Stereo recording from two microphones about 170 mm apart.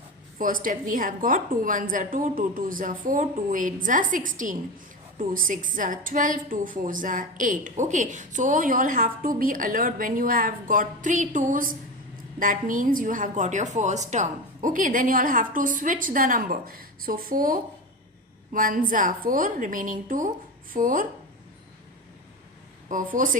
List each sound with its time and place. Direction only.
0.3 s a woman's voice: 55° right (ahead or behind)
22.9 s a woman's voice: 50° right (ahead or behind)